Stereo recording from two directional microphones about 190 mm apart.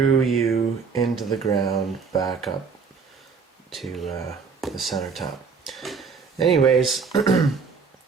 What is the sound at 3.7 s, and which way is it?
Speech, centre (ahead or behind).